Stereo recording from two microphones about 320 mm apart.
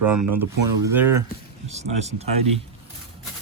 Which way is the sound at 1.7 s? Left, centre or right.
Centre.